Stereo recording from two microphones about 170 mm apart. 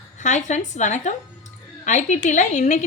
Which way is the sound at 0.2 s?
45° left (ahead or behind).